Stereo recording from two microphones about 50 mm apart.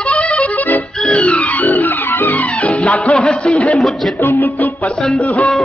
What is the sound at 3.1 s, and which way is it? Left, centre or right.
Speech, centre.